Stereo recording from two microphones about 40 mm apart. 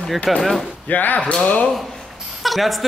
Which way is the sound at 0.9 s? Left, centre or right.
Left.